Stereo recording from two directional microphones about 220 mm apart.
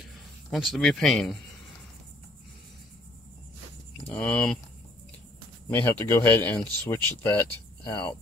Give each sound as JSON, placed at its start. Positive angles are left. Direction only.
{"t": 0.5, "sound": "speech", "side_deg": 0}
{"t": 4.1, "sound": "speech", "side_deg": 5}
{"t": 5.8, "sound": "speech", "side_deg": 10}